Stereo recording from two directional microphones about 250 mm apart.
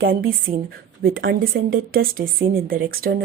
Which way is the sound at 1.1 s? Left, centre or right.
Right.